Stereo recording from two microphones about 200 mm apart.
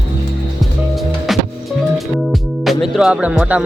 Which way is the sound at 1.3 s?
Centre (ahead or behind).